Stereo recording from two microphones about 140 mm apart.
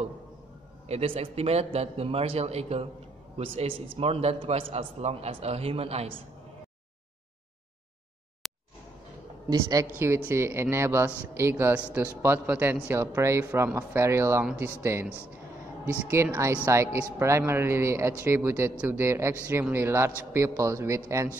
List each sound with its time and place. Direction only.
0.8 s a man's voice: 45° right (ahead or behind)
9.5 s a man's voice: 25° right (ahead or behind)